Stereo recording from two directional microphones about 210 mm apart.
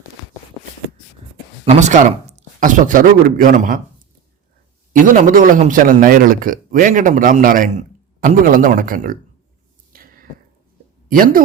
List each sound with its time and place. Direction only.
1.6 s speech: 35° right (ahead or behind)
4.9 s a man's voice: 40° right (ahead or behind)
9.9 s a sound: 40° right (ahead or behind)
11.1 s a man's voice: 40° right (ahead or behind)